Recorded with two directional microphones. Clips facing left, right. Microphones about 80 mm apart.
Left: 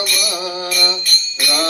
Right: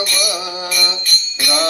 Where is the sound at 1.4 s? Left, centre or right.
Right.